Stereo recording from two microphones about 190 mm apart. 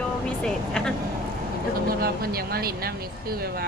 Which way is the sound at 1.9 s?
50° right (ahead or behind).